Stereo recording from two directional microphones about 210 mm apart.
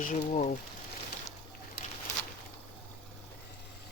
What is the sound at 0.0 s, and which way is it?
Speech, 40° left (ahead or behind).